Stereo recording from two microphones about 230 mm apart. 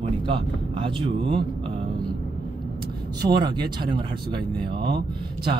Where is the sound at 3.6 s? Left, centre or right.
Centre.